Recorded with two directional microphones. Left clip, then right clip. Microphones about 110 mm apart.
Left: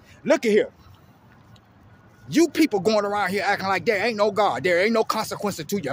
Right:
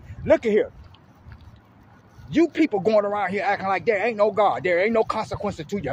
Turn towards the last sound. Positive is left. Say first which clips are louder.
# left 1 dB
turn(degrees=40)  # may be behind; listen again after turning